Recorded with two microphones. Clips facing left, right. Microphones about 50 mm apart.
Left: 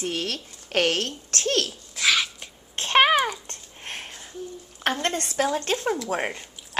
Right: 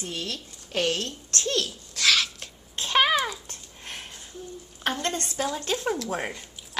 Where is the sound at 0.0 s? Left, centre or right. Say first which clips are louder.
Left 5 dB; left.